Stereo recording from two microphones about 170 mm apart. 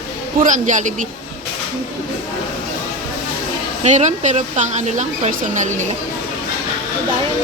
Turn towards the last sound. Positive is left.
turn(degrees=-50)  # may be behind; listen again after turning